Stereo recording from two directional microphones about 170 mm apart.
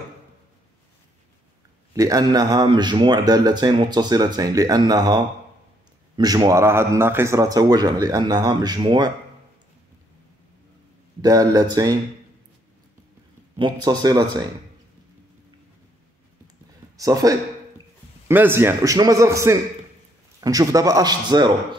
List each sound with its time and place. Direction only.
2.0 s speech: 20° right (ahead or behind)
11.1 s speech: 20° right (ahead or behind)
13.6 s speech: 25° right (ahead or behind)
16.9 s a man's voice: 20° right (ahead or behind)